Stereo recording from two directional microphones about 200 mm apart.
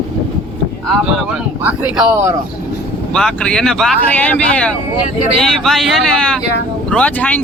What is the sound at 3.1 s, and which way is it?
Speech, 5° left (ahead or behind).